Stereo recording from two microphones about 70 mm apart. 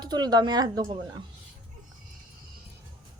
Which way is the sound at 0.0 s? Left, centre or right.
Right.